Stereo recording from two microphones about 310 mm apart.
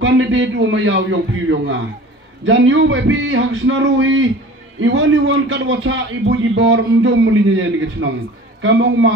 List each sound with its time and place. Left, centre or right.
0.0 s a man's voice: right
2.4 s a man's voice: right